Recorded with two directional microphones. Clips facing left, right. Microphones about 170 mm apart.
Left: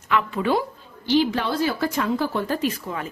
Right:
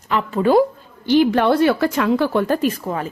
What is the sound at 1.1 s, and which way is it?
Speech, 55° right (ahead or behind).